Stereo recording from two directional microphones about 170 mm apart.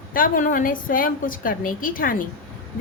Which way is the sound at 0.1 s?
55° left (ahead or behind).